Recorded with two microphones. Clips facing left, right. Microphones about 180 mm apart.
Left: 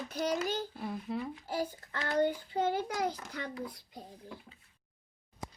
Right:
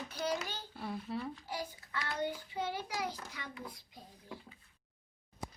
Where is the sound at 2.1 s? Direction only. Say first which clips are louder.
Left 9 dB; 50° left (ahead or behind).